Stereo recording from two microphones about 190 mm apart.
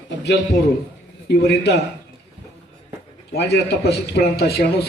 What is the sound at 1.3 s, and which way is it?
Speech, 60° left (ahead or behind).